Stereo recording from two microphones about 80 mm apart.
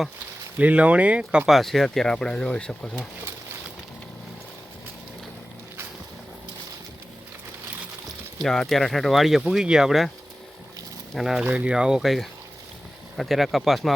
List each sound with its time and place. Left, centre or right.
0.6 s speech: centre
1.5 s speech: centre
8.4 s speech: centre
11.1 s speech: centre
11.4 s speech: centre